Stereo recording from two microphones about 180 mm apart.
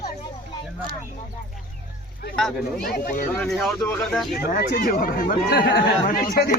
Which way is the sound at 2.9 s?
50° left (ahead or behind).